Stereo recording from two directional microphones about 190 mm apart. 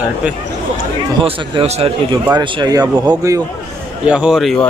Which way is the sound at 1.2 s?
30° right (ahead or behind).